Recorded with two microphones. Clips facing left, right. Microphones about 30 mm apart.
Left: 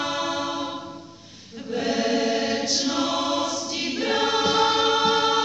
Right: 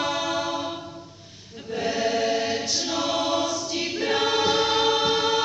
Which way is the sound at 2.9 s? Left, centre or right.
Centre.